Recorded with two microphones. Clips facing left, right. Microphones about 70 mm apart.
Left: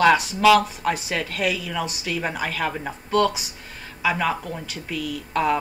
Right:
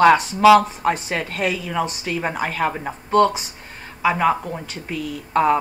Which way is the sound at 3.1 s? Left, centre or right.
Right.